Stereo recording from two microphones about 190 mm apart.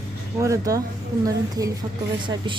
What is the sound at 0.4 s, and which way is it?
Speech, 15° right (ahead or behind).